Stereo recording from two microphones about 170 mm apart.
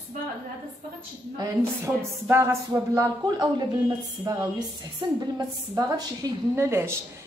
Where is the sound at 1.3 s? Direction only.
15° right (ahead or behind).